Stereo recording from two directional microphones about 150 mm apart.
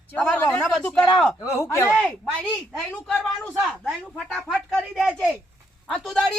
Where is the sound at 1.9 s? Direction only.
Centre (ahead or behind).